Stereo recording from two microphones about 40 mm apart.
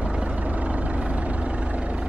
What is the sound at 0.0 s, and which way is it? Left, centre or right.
Vehicle, right.